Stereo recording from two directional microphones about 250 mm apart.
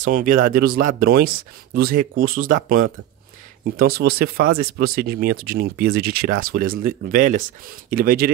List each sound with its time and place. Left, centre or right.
0.0 s speech: right